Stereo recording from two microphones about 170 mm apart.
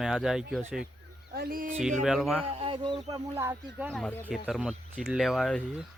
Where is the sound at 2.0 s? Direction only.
Centre (ahead or behind).